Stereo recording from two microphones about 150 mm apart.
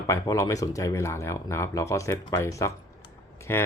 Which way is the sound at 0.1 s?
20° left (ahead or behind).